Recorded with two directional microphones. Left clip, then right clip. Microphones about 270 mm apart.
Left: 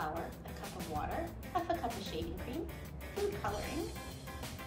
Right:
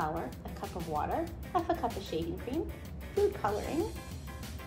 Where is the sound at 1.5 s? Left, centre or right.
Centre.